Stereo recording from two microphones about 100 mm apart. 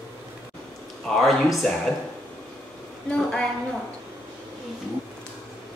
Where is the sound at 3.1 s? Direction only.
5° left (ahead or behind).